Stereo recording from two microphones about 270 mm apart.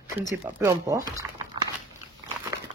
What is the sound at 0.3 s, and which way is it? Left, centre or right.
Speech, centre.